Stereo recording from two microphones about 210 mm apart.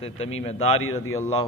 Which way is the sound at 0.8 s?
75° left (ahead or behind).